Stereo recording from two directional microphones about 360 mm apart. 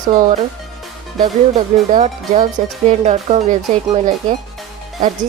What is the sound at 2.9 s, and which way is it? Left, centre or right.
Speech, centre.